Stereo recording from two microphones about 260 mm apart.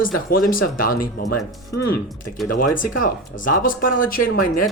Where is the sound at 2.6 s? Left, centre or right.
Left.